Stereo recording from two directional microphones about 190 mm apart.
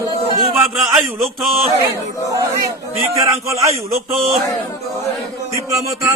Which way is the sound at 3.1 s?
15° right (ahead or behind).